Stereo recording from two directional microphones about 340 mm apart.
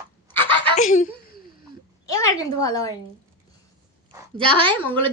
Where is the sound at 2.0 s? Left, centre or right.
Centre.